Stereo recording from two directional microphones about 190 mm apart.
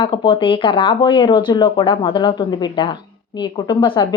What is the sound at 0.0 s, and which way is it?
Speech, 25° left (ahead or behind).